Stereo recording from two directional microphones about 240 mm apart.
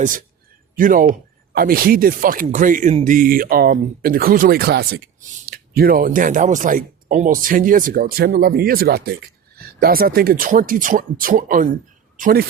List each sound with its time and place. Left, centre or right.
0.8 s speech: right